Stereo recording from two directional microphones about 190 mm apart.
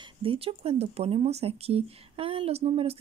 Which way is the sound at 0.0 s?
30° right (ahead or behind).